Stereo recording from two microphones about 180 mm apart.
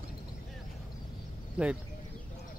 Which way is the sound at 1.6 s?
5° right (ahead or behind).